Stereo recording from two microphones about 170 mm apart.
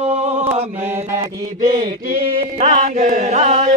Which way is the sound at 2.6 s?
40° right (ahead or behind).